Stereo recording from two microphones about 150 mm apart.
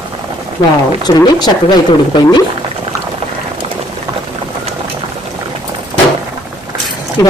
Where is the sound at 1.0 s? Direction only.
25° left (ahead or behind).